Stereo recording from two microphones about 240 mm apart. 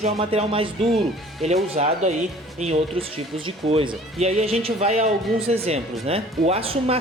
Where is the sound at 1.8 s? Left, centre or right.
Right.